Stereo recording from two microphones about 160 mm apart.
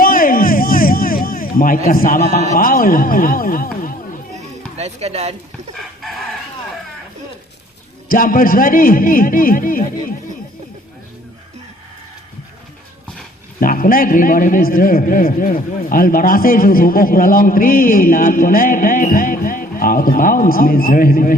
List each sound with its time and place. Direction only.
0.0 s music: 60° left (ahead or behind)
1.9 s a man's voice: 60° left (ahead or behind)
4.4 s music: 40° right (ahead or behind)
6.0 s chicken: centre (ahead or behind)
8.1 s a man's voice: 60° left (ahead or behind)
13.6 s a man's voice: 60° left (ahead or behind)